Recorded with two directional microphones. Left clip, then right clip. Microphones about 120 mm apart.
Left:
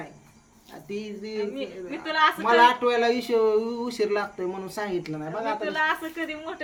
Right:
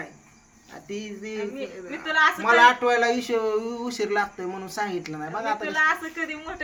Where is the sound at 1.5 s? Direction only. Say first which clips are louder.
Even; 5° right (ahead or behind).